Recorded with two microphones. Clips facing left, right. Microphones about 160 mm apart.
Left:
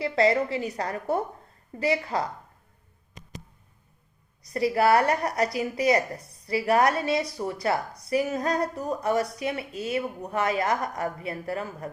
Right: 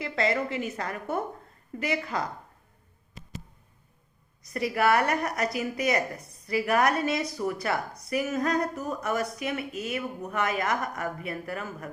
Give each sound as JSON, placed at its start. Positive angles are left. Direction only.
{"t": 0.0, "sound": "a woman's voice", "side_deg": 35}
{"t": 4.4, "sound": "a woman's voice", "side_deg": 30}